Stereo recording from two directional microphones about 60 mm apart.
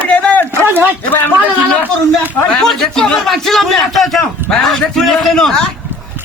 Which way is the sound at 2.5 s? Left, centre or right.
Centre.